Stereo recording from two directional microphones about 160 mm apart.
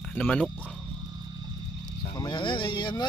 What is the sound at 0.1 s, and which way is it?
Speech, 10° left (ahead or behind).